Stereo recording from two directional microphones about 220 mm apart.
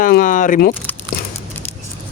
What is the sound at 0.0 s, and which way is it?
Speech, 40° left (ahead or behind).